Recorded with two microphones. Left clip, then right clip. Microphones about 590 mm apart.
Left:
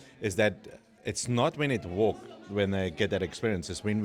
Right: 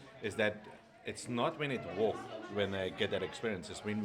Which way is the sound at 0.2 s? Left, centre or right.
Left.